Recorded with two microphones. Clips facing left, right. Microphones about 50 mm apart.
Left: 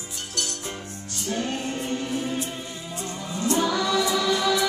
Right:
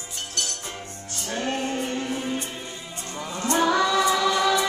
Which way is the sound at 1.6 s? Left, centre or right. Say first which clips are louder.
Right 1 dB; centre.